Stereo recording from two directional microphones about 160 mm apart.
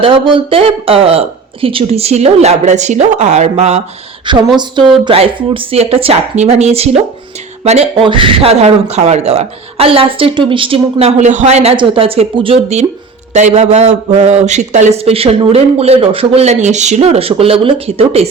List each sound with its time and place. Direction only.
0.0 s a man's voice: 30° right (ahead or behind)
4.5 s a man's voice: 30° right (ahead or behind)